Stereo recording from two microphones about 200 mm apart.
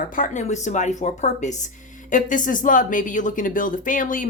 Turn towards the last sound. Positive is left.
turn(degrees=40)  # may be behind; listen again after turning